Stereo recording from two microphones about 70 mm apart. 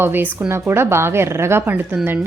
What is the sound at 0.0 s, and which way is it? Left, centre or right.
A woman's voice, right.